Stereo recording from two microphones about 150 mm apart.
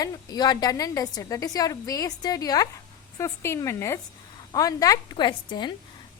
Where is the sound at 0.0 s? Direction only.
25° left (ahead or behind).